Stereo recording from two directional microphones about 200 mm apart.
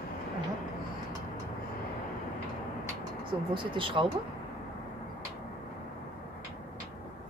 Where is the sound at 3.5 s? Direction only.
25° right (ahead or behind).